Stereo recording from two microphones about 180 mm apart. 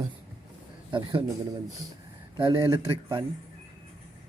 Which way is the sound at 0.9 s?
25° right (ahead or behind).